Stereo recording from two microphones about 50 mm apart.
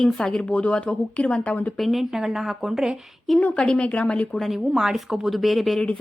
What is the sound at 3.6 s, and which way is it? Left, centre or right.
Speech, centre.